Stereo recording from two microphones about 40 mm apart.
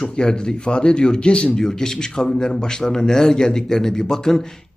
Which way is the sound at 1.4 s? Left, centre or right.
Centre.